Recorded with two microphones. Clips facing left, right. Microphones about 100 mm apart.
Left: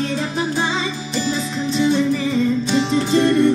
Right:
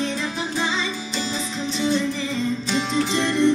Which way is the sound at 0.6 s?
45° left (ahead or behind).